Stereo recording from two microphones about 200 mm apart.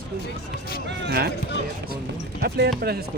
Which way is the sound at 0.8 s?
55° right (ahead or behind).